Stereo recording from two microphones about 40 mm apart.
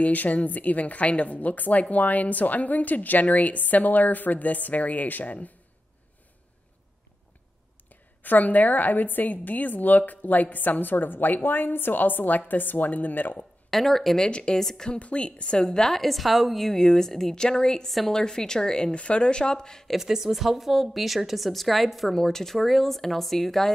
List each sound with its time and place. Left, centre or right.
0.0 s a woman's voice: left
7.9 s a woman's voice: left
13.7 s a woman's voice: centre
14.1 s a woman's voice: left
14.9 s a woman's voice: left
15.9 s a woman's voice: centre
17.8 s a woman's voice: centre
18.1 s a woman's voice: centre
20.1 s a woman's voice: centre
22.1 s a woman's voice: centre